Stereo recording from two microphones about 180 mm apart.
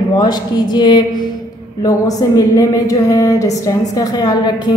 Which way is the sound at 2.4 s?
20° left (ahead or behind).